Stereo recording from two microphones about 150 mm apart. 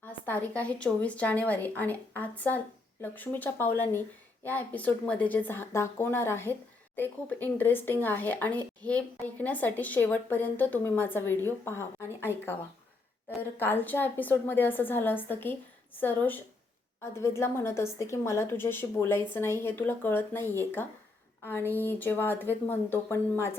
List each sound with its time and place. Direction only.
0.1 s a woman's voice: 10° left (ahead or behind)
13.6 s a woman's voice: 15° left (ahead or behind)